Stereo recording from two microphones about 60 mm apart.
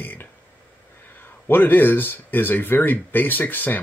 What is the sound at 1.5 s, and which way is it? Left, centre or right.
Speech, left.